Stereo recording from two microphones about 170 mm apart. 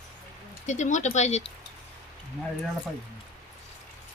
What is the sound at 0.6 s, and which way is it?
Speech, 45° left (ahead or behind).